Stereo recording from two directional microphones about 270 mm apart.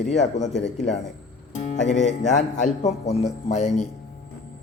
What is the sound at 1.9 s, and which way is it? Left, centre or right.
A man's voice, left.